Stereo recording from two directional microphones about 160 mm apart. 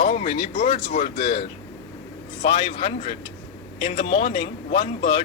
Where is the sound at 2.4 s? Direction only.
35° left (ahead or behind).